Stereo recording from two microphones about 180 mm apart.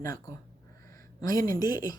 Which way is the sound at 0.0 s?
20° left (ahead or behind).